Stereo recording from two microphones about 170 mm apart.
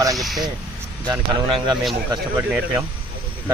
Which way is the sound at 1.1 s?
25° right (ahead or behind).